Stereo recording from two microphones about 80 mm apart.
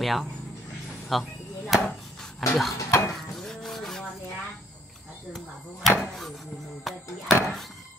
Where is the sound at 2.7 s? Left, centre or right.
Left.